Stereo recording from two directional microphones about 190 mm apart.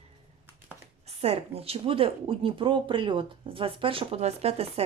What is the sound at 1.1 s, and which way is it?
A woman's voice, 35° right (ahead or behind).